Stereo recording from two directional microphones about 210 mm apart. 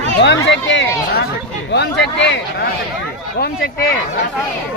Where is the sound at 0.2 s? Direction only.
55° left (ahead or behind).